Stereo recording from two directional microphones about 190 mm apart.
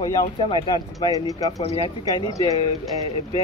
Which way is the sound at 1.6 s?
30° left (ahead or behind).